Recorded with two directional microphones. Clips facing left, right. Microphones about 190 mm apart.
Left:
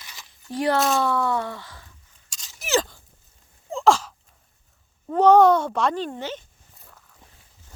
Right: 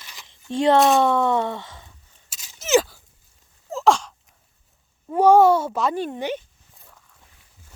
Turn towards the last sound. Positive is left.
turn(degrees=0)  # may be behind; listen again after turning